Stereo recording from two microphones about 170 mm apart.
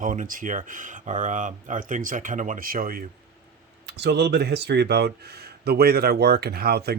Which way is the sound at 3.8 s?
85° right.